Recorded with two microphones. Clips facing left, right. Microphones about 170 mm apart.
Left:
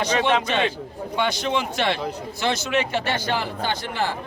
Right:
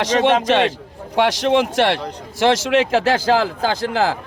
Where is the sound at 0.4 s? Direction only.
90° right.